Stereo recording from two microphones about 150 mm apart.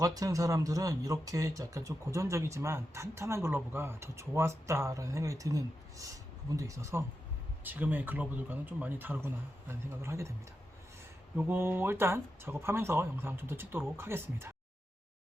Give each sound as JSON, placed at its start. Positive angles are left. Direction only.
{"t": 0.0, "sound": "speech", "side_deg": -25}
{"t": 11.3, "sound": "speech", "side_deg": -15}